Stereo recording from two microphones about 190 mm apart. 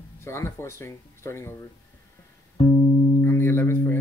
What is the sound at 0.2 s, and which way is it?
Speech, 15° left (ahead or behind).